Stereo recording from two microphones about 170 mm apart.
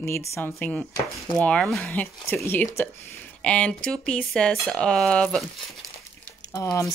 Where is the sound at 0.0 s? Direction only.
15° left (ahead or behind).